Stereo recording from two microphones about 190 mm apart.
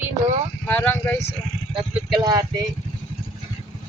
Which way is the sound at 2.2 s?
20° right (ahead or behind).